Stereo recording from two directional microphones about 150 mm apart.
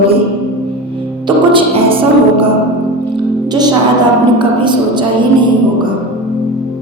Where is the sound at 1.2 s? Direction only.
35° right (ahead or behind).